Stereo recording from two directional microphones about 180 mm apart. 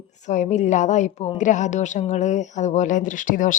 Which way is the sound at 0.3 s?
40° left (ahead or behind).